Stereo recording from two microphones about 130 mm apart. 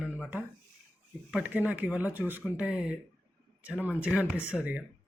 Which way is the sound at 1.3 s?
15° right (ahead or behind).